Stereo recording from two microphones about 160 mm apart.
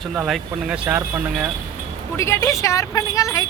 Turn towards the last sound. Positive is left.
turn(degrees=20)  # may be behind; listen again after turning